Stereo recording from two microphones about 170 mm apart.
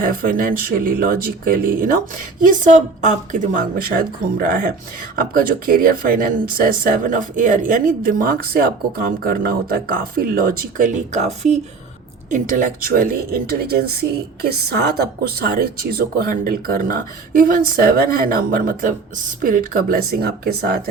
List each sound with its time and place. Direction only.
0.0 s speech: 55° right (ahead or behind)
12.3 s speech: 55° right (ahead or behind)